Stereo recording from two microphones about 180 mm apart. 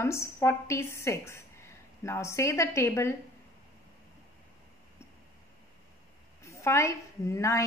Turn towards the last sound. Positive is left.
turn(degrees=15)  # may be behind; listen again after turning